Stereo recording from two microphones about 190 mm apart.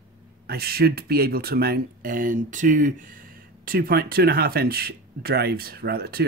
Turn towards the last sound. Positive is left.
turn(degrees=-55)  # may be behind; listen again after turning